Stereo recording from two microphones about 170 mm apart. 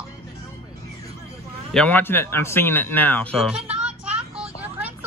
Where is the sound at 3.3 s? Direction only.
5° right (ahead or behind).